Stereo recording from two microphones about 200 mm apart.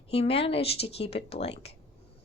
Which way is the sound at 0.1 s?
30° left (ahead or behind).